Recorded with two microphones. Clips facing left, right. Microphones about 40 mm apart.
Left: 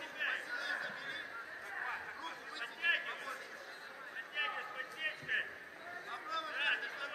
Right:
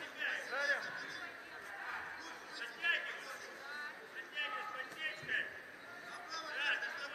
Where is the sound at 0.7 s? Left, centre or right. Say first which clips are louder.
Right 2 dB; left.